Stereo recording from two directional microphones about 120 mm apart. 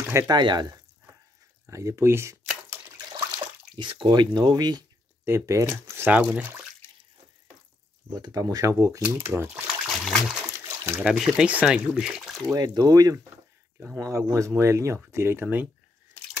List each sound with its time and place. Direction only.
0.0 s a sound: 20° right (ahead or behind)
0.3 s speech: 40° right (ahead or behind)
1.7 s speech: 25° right (ahead or behind)
3.7 s speech: 40° right (ahead or behind)
5.2 s speech: 20° right (ahead or behind)
8.1 s speech: 35° right (ahead or behind)
9.3 s speech: 5° right (ahead or behind)
9.8 s water: centre (ahead or behind)
10.6 s a sound: 20° right (ahead or behind)
11.1 s speech: 5° right (ahead or behind)
12.5 s speech: 35° right (ahead or behind); by 15.7 s 15° right (ahead or behind)